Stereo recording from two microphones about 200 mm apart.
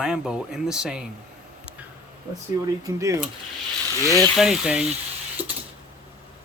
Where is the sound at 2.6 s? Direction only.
15° right (ahead or behind).